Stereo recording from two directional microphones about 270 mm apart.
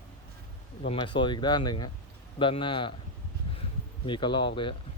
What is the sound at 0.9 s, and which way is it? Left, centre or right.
Speech, centre.